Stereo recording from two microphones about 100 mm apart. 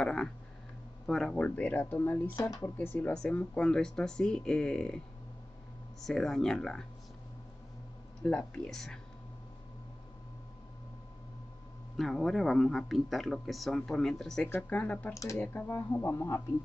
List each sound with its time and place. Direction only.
0.0 s a sound: 10° left (ahead or behind)
1.0 s speech: 5° left (ahead or behind); by 3.1 s 20° left (ahead or behind)
3.1 s speech: 10° left (ahead or behind)
8.2 s speech: 10° left (ahead or behind)
12.0 s speech: centre (ahead or behind); by 16.4 s 25° left (ahead or behind)